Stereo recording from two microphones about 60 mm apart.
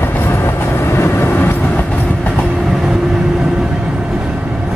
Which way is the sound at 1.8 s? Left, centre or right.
Centre.